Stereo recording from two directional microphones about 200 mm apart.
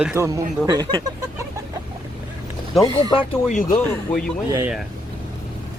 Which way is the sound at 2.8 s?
25° left (ahead or behind).